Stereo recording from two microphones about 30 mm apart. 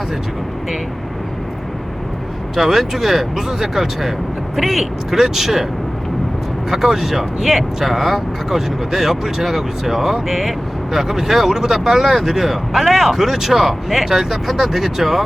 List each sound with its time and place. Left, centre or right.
2.6 s speech: centre
4.5 s speech: centre
5.1 s speech: centre
6.7 s speech: centre